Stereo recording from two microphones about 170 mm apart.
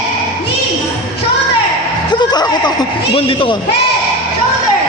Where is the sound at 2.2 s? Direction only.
25° left (ahead or behind).